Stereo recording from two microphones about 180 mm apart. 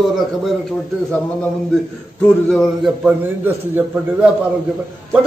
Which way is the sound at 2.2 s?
Centre (ahead or behind).